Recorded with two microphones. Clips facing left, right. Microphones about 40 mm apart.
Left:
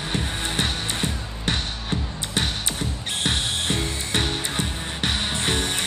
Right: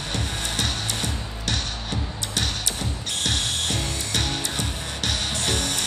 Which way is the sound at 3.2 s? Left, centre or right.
Left.